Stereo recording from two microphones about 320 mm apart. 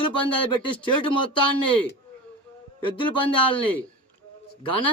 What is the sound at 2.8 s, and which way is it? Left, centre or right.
Speech, centre.